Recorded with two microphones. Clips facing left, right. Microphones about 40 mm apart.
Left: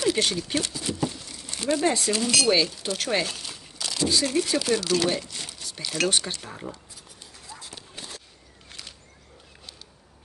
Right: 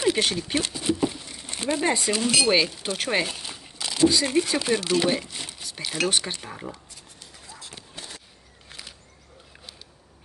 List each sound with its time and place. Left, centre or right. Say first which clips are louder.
0.0 s speech: right 1 dB; centre
8.6 s single-lens reflex camera: right 1 dB; centre